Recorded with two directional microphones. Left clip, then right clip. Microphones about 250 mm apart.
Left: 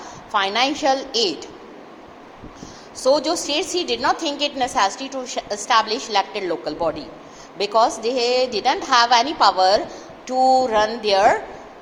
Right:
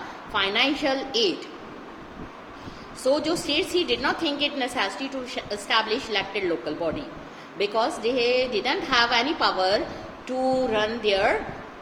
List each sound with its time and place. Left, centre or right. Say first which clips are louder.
0.3 s a woman's voice: left 4 dB; centre
3.1 s a woman's voice: left 5 dB; centre